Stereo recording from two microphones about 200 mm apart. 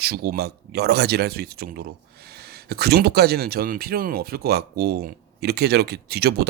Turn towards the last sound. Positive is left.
turn(degrees=-55)  # may be behind; listen again after turning